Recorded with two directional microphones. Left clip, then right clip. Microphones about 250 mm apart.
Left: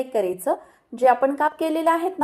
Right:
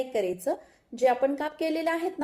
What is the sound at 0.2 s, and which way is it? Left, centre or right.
A woman's voice, left.